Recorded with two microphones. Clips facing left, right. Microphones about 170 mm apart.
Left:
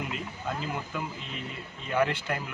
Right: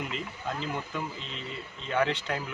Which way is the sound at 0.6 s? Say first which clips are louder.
Even; 5° left (ahead or behind).